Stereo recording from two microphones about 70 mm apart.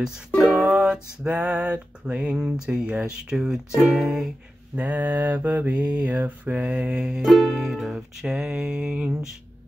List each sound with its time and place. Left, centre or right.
0.5 s music: centre
4.7 s mantra: right
6.0 s music: right